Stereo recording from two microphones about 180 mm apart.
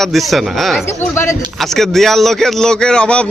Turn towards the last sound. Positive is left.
turn(degrees=5)  # may be behind; listen again after turning